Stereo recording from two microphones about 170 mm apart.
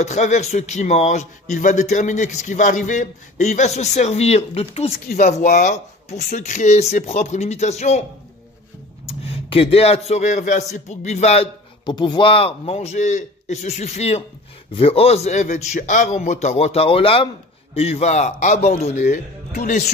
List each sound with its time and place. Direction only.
0.0 s a man's voice: 45° left (ahead or behind)
9.0 s a man's voice: 35° left (ahead or behind)
11.8 s a man's voice: 25° left (ahead or behind); by 19.1 s 45° left (ahead or behind)
19.5 s a man's voice: 55° left (ahead or behind)